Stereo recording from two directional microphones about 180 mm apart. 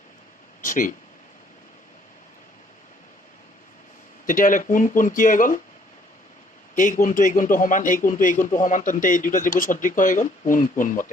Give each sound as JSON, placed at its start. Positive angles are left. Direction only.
{"t": 0.6, "sound": "a sound", "side_deg": 45}
{"t": 4.3, "sound": "speech", "side_deg": 45}
{"t": 6.7, "sound": "speech", "side_deg": 45}